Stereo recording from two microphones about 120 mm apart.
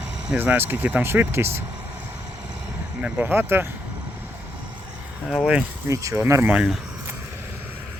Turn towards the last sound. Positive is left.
turn(degrees=-10)  # may be behind; listen again after turning